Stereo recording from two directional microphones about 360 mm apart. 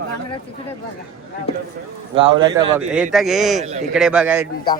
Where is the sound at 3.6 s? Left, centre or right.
Centre.